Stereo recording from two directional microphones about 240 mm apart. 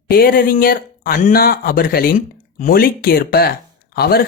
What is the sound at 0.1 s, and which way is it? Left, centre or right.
Speech, left.